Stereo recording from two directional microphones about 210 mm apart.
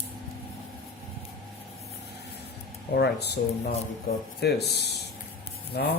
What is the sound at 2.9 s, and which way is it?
Speech, 50° left (ahead or behind).